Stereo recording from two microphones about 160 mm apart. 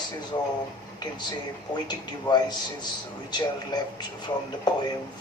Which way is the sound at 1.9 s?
25° left (ahead or behind).